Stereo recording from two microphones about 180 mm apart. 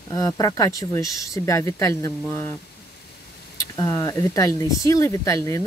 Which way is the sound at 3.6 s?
15° left (ahead or behind).